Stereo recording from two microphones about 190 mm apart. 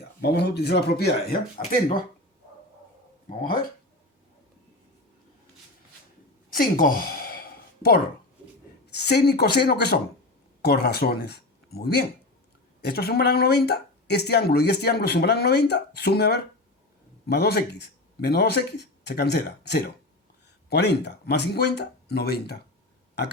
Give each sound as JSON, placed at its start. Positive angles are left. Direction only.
{"t": 0.2, "sound": "speech", "side_deg": 60}
{"t": 6.5, "sound": "speech", "side_deg": 50}
{"t": 8.9, "sound": "speech", "side_deg": 60}